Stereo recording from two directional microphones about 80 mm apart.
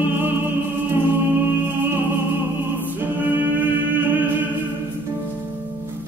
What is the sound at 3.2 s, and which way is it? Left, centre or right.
Music, right.